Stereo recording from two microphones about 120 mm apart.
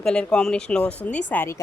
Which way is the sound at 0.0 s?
5° left (ahead or behind).